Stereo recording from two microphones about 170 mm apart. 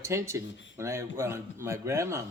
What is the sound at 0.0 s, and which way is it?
Speech, 15° right (ahead or behind).